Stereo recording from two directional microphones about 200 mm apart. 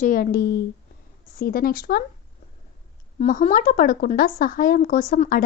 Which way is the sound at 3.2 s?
40° left (ahead or behind).